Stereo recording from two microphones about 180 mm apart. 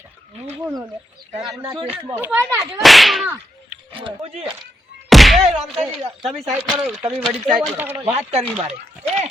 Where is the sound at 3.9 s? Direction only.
30° right (ahead or behind).